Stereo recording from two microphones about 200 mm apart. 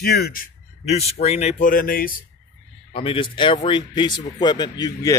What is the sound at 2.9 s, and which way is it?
A man's voice, 25° left (ahead or behind).